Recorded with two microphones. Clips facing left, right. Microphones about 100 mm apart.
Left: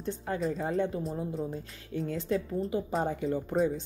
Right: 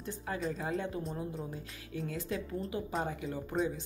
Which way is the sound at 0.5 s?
40° left (ahead or behind).